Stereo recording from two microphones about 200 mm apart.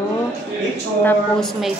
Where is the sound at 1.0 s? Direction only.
10° left (ahead or behind).